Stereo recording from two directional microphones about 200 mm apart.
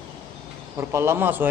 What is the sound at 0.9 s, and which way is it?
Speech, 15° right (ahead or behind).